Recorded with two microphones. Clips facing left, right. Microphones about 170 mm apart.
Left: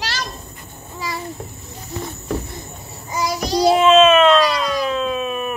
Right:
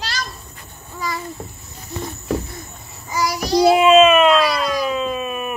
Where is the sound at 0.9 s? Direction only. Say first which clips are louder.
Right 2 dB; 25° left (ahead or behind).